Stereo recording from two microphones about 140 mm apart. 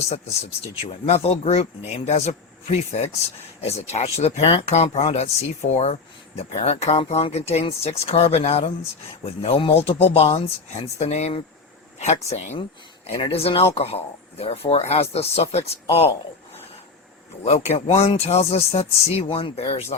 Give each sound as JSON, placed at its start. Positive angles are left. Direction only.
{"t": 0.8, "sound": "speech", "side_deg": 45}
{"t": 13.2, "sound": "speech", "side_deg": 40}
{"t": 17.4, "sound": "speech", "side_deg": 50}